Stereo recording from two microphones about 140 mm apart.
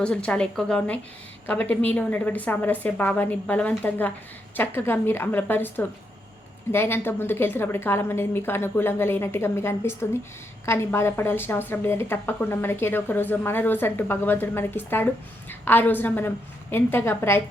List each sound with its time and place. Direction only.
0.0 s a woman's voice: 5° left (ahead or behind)